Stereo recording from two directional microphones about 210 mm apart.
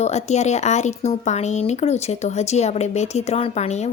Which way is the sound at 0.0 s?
30° left (ahead or behind).